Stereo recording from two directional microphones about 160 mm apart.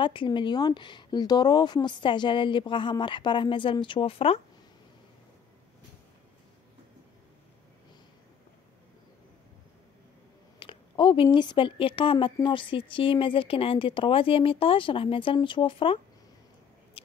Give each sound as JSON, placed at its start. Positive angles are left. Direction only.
{"t": 0.0, "sound": "speech", "side_deg": 30}
{"t": 10.6, "sound": "a sound", "side_deg": 30}
{"t": 11.2, "sound": "a woman's voice", "side_deg": 30}